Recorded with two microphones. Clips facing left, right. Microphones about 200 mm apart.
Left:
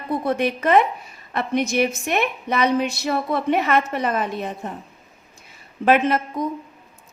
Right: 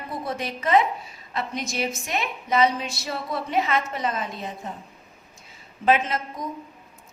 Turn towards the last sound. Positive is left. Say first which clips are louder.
# left 8 dB
turn(degrees=60)  # may be behind; listen again after turning